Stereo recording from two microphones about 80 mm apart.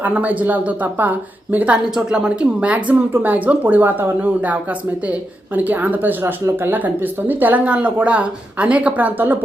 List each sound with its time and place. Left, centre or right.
0.0 s speech: centre